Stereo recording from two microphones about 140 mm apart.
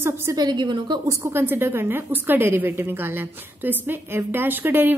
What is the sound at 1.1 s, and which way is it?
A woman's voice, 20° right (ahead or behind).